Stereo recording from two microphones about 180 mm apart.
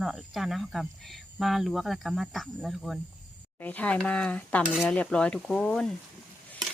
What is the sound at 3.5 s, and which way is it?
Cutlery, 10° left (ahead or behind).